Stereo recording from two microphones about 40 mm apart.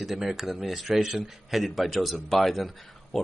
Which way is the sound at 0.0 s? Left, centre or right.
Centre.